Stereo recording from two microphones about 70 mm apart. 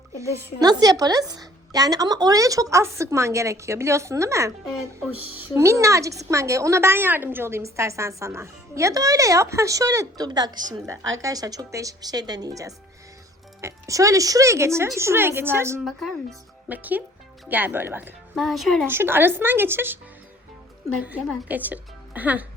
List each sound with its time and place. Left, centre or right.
0.6 s a woman's voice: right
5.5 s a woman's voice: right
10.2 s a woman's voice: right
10.8 s speech: right
13.6 s a woman's voice: right
15.8 s speech: centre
16.6 s speech: right
18.3 s speech: centre
18.9 s speech: right
21.4 s speech: right